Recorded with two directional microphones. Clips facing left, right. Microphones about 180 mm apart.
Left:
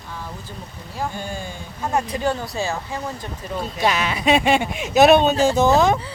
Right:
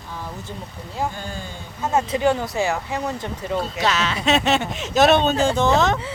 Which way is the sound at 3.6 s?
15° left (ahead or behind).